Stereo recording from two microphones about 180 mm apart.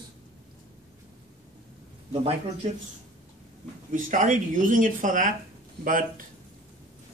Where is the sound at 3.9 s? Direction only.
45° right (ahead or behind).